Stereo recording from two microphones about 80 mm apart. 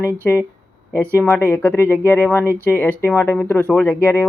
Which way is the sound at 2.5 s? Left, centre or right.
Right.